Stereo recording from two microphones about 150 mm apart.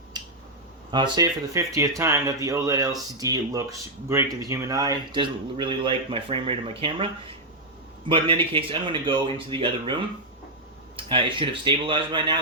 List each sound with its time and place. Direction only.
0.1 s finger snapping: 25° right (ahead or behind)
0.9 s speech: 30° right (ahead or behind)
8.1 s speech: 35° right (ahead or behind)
10.9 s speech: 35° right (ahead or behind)